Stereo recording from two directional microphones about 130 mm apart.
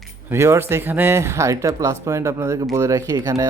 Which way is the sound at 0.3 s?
20° right (ahead or behind).